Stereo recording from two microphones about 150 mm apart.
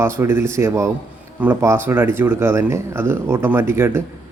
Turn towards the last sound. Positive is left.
turn(degrees=-15)  # may be behind; listen again after turning